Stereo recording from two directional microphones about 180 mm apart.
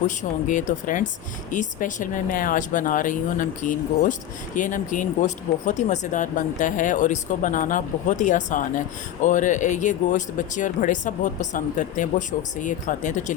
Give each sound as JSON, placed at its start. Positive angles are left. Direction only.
{"t": 0.2, "sound": "speech", "side_deg": 45}